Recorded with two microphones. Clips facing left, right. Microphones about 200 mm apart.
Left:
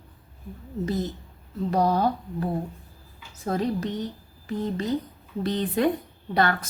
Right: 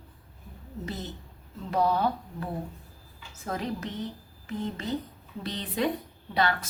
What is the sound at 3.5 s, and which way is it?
Speech, 35° left (ahead or behind).